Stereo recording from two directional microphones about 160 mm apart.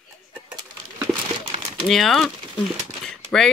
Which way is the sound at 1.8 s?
Centre (ahead or behind).